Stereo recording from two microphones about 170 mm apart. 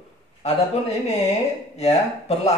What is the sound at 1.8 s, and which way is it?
Speech, 40° left (ahead or behind).